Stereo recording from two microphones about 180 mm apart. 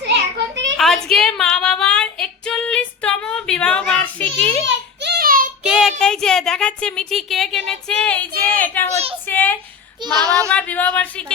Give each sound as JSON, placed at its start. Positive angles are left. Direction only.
{"t": 0.1, "sound": "children playing", "side_deg": -80}
{"t": 0.8, "sound": "female singing", "side_deg": 0}
{"t": 4.6, "sound": "child singing", "side_deg": -65}
{"t": 5.6, "sound": "a woman's voice", "side_deg": -5}
{"t": 8.5, "sound": "a sound", "side_deg": 10}
{"t": 9.3, "sound": "a woman's voice", "side_deg": 10}
{"t": 10.1, "sound": "speech", "side_deg": -20}
{"t": 10.5, "sound": "a woman's voice", "side_deg": 10}